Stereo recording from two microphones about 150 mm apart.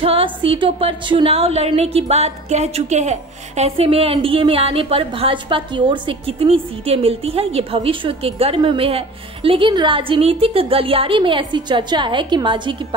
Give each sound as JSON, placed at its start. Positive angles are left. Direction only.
{"t": 0.0, "sound": "a woman's voice", "side_deg": -40}